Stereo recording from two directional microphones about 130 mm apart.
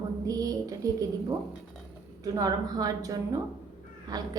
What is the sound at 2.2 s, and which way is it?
A woman's voice, 30° right (ahead or behind).